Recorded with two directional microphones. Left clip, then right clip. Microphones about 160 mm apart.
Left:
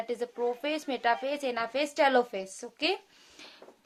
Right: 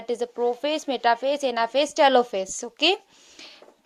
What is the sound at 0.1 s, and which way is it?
A woman's voice, 30° right (ahead or behind).